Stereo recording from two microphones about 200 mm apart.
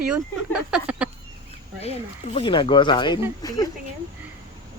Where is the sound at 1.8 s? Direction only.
30° left (ahead or behind).